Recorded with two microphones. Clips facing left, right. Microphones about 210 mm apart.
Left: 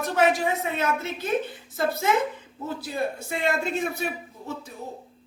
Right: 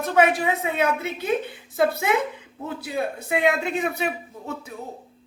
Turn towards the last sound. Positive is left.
turn(degrees=-60)  # may be behind; listen again after turning